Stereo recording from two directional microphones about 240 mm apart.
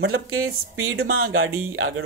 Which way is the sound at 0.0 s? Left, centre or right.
Right.